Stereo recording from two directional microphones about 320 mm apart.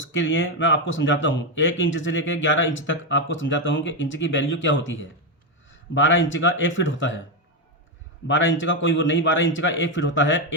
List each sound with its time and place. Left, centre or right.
0.0 s speech: left
8.3 s speech: left